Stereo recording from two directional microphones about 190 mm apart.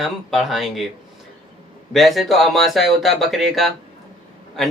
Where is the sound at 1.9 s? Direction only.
Centre (ahead or behind).